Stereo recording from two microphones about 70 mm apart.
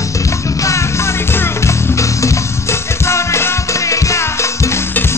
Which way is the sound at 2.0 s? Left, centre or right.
Left.